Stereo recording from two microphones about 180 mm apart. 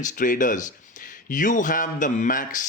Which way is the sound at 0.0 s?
45° left (ahead or behind).